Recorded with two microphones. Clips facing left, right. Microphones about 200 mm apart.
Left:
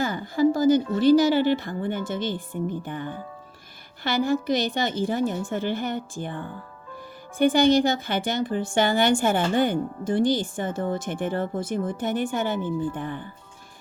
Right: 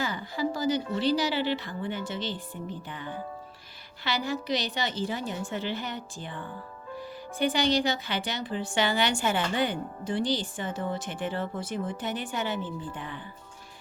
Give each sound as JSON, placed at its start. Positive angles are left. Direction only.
{"t": 0.0, "sound": "speech", "side_deg": 50}